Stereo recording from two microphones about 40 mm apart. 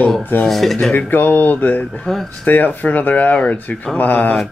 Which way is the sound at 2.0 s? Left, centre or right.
Centre.